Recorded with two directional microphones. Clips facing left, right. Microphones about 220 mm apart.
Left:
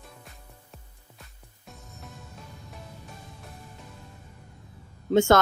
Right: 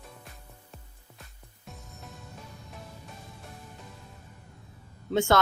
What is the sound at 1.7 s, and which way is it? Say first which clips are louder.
Music: even; centre (ahead or behind).